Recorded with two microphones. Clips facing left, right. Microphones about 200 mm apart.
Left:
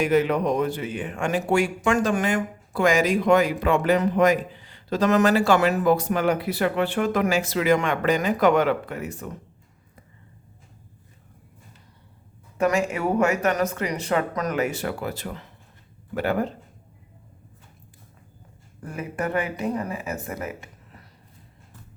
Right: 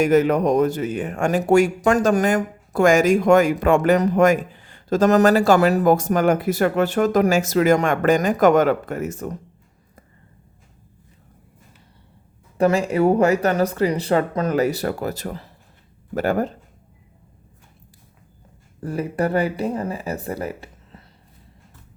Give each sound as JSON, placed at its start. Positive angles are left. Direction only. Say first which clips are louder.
{"t": 0.0, "sound": "speech", "louder": "right 4 dB", "side_deg": -45}
{"t": 12.5, "sound": "speech", "louder": "right 5 dB", "side_deg": -35}
{"t": 18.8, "sound": "speech", "louder": "right 7 dB", "side_deg": -35}